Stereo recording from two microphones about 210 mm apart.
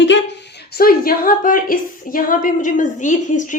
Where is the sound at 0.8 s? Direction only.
45° left (ahead or behind).